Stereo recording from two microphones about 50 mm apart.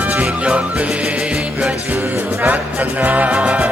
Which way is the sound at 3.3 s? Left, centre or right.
Centre.